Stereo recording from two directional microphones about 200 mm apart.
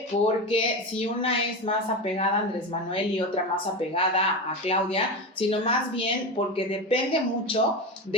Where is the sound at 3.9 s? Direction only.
30° left (ahead or behind).